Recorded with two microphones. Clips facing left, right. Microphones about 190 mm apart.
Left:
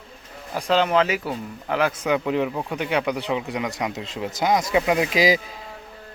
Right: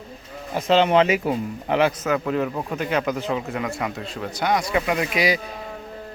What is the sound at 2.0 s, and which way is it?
Speech, 5° left (ahead or behind).